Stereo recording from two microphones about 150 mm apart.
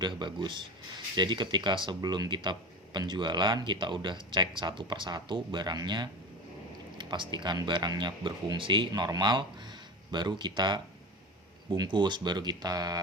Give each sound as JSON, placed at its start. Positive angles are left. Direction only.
{"t": 0.0, "sound": "speech", "side_deg": -30}